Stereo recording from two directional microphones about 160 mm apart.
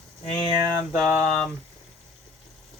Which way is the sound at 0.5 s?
20° right (ahead or behind).